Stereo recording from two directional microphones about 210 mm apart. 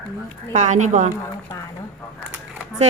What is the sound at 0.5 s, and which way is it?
Speech, 35° right (ahead or behind).